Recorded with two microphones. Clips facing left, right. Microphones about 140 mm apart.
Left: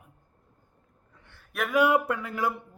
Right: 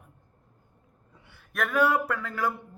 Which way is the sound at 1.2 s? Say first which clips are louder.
Right 1 dB; 5° right (ahead or behind).